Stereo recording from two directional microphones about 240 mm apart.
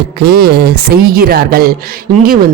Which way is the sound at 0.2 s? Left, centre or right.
Right.